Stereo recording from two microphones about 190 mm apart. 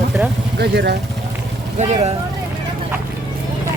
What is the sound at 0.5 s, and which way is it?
Speech, 60° right (ahead or behind).